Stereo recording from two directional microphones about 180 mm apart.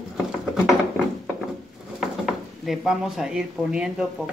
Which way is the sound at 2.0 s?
Centre (ahead or behind).